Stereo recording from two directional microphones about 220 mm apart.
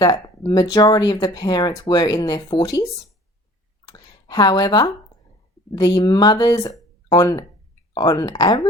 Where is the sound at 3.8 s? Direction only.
20° left (ahead or behind).